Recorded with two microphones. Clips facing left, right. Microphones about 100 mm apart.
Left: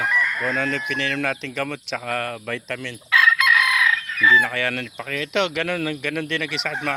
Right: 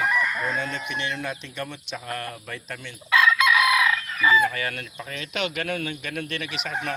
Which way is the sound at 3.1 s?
5° right (ahead or behind).